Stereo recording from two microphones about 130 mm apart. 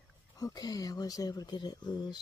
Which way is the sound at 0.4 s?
30° left (ahead or behind).